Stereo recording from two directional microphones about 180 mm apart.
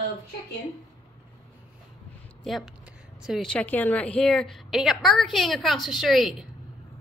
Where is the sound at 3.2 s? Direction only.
Centre (ahead or behind).